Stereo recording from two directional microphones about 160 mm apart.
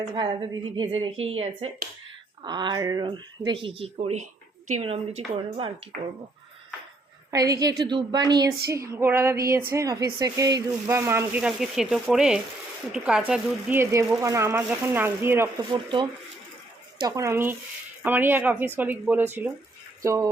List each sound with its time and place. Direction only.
0.0 s a woman's voice: 30° right (ahead or behind)
7.3 s speech: 20° right (ahead or behind)
15.7 s speech: 30° right (ahead or behind)